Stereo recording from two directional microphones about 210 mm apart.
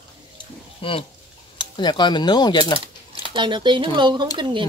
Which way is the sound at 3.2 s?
20° right (ahead or behind).